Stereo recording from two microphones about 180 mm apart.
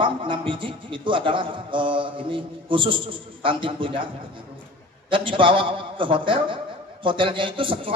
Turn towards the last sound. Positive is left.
turn(degrees=-30)  # may be behind; listen again after turning